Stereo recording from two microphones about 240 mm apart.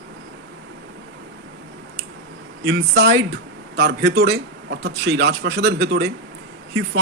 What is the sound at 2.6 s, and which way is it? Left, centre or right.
Speech, right.